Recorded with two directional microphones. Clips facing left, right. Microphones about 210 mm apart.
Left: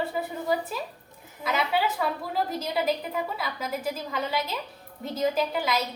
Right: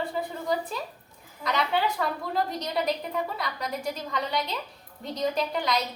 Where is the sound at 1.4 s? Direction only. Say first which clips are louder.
Even; 5° left (ahead or behind).